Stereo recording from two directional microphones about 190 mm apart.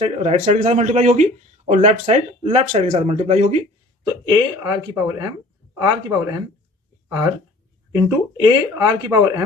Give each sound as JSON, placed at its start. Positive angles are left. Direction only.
{"t": 0.0, "sound": "speech", "side_deg": -35}
{"t": 4.0, "sound": "speech", "side_deg": -20}
{"t": 7.9, "sound": "speech", "side_deg": -15}